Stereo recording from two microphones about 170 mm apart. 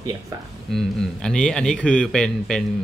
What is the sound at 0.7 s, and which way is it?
A man's voice, centre (ahead or behind).